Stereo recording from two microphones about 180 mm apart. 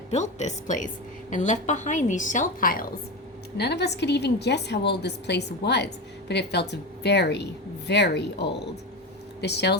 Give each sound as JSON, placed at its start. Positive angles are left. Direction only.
{"t": 0.1, "sound": "a woman's voice", "side_deg": 40}
{"t": 3.6, "sound": "a woman's voice", "side_deg": 65}